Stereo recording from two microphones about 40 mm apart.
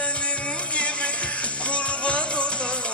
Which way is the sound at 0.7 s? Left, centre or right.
Left.